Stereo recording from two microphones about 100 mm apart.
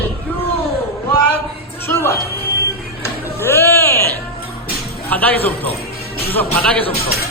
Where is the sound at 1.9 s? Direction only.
25° left (ahead or behind).